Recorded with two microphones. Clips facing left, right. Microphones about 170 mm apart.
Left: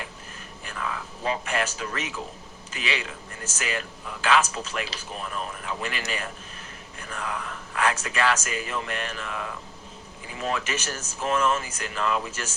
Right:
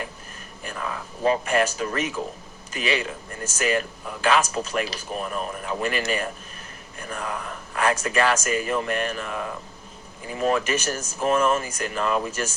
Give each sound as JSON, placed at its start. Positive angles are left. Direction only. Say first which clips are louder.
{"t": 0.6, "sound": "speech", "louder": "right 2 dB", "side_deg": -40}